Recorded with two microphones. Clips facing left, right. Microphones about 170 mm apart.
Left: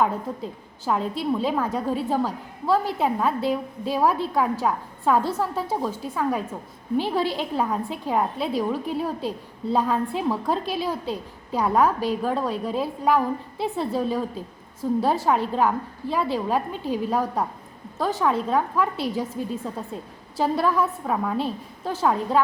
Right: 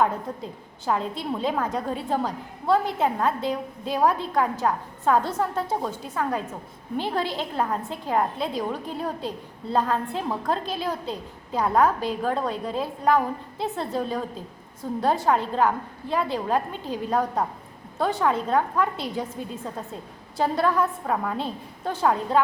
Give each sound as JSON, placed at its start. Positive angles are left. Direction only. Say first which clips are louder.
{"t": 0.3, "sound": "a woman's voice", "louder": "left 2 dB", "side_deg": 5}